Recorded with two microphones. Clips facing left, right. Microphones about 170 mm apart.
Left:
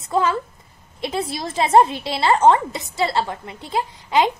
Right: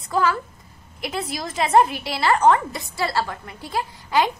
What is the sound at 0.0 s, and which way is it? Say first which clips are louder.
A woman's voice: left 1 dB; 25° left (ahead or behind).